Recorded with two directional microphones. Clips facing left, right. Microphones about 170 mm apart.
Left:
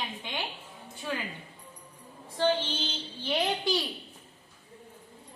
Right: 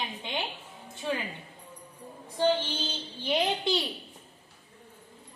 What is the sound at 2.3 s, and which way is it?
Female singing, 15° right (ahead or behind).